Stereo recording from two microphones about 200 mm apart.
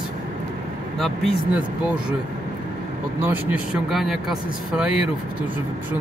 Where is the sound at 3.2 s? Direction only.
10° right (ahead or behind).